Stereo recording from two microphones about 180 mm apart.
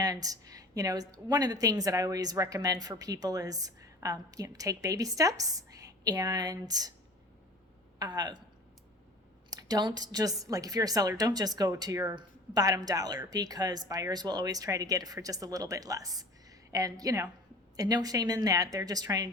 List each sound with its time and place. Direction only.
0.0 s a woman's voice: 20° right (ahead or behind)
7.9 s a woman's voice: 20° right (ahead or behind)
9.5 s a woman's voice: 20° right (ahead or behind)